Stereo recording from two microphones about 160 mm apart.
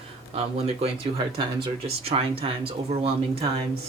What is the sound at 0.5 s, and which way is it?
Speech, 40° right (ahead or behind).